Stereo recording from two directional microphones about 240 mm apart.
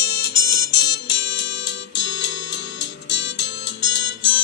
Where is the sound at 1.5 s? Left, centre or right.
Left.